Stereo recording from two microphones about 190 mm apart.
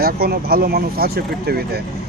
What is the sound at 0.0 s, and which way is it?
Speech, 55° right (ahead or behind).